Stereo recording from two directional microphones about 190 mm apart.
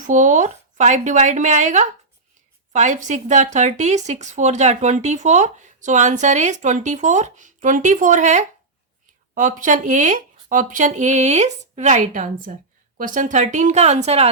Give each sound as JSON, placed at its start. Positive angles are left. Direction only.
{"t": 0.0, "sound": "a woman's voice", "side_deg": -40}